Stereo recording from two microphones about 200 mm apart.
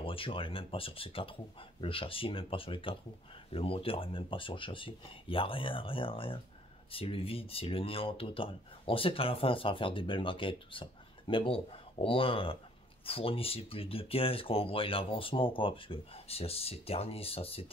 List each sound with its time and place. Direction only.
0.0 s speech: 25° left (ahead or behind)